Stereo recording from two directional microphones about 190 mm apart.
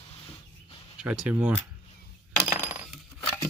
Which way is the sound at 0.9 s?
5° right (ahead or behind).